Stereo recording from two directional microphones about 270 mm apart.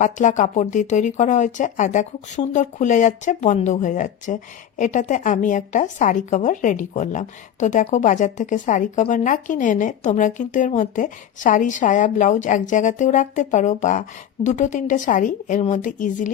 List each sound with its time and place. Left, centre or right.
0.0 s speech: left